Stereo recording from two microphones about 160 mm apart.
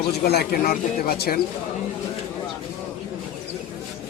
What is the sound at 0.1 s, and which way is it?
Speech, 85° left.